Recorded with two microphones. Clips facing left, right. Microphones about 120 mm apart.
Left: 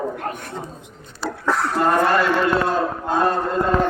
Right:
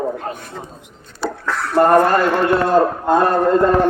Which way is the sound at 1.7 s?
50° right (ahead or behind).